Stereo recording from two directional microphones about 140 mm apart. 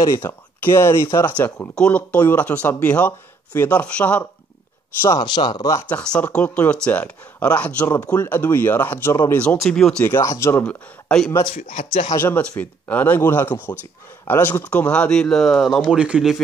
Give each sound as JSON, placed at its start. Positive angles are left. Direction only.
{"t": 0.0, "sound": "speech", "side_deg": 20}
{"t": 5.0, "sound": "speech", "side_deg": 25}
{"t": 5.9, "sound": "speech", "side_deg": 10}
{"t": 10.0, "sound": "speech", "side_deg": 20}
{"t": 10.6, "sound": "speech", "side_deg": 5}
{"t": 12.1, "sound": "speech", "side_deg": 15}